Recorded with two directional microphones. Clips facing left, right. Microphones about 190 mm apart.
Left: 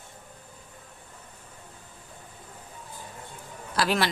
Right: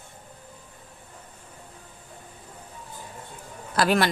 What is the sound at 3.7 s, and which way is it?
Speech, 50° right (ahead or behind).